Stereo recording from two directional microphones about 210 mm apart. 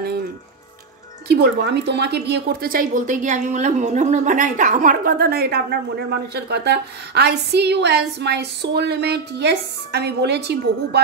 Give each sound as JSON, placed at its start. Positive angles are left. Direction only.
{"t": 1.3, "sound": "a woman's voice", "side_deg": -50}